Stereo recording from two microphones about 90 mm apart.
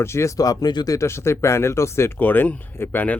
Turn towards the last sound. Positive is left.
turn(degrees=20)  # may be behind; listen again after turning